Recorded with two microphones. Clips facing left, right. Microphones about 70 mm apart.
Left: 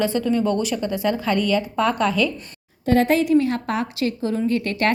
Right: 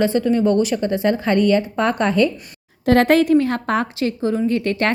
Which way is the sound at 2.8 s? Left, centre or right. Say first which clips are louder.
Right 4 dB; right.